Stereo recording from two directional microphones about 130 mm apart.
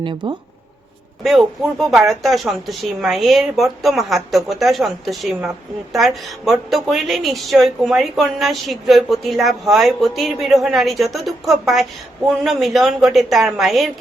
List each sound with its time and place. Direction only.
0.0 s speech: 40° right (ahead or behind)
1.2 s a woman's voice: centre (ahead or behind)